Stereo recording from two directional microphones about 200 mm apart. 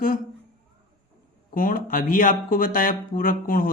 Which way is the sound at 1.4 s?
45° left (ahead or behind).